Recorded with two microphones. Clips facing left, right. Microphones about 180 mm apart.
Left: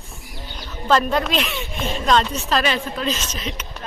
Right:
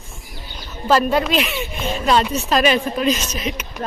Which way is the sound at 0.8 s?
5° right (ahead or behind).